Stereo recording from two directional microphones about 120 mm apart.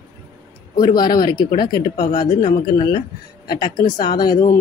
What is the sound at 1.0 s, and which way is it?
Speech, 35° left (ahead or behind).